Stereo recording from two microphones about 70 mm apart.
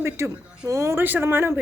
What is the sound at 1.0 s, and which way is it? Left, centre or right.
Speech, right.